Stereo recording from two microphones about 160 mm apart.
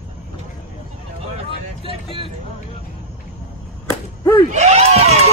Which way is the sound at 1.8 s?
35° right (ahead or behind).